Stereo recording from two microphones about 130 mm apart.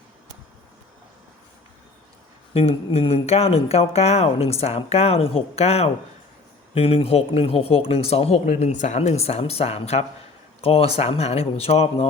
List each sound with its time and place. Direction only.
2.5 s speech: 50° left (ahead or behind)